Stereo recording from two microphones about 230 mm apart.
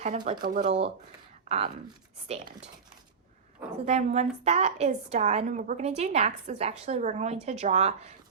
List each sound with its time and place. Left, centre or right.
0.0 s a woman's voice: right
0.4 s a woman's voice: right
3.6 s a woman's voice: right